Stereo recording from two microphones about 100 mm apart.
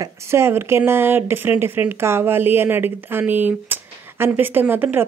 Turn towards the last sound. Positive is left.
turn(degrees=-20)  # may be behind; listen again after turning